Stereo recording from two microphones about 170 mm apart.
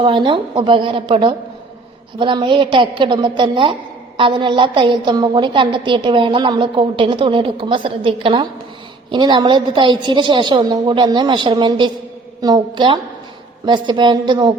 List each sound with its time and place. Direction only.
0.0 s a woman's voice: 30° right (ahead or behind)